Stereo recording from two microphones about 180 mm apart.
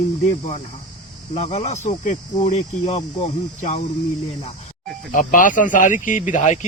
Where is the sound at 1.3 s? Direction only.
35° left (ahead or behind).